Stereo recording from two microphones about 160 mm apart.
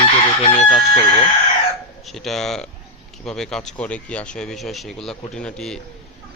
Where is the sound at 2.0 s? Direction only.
Centre (ahead or behind).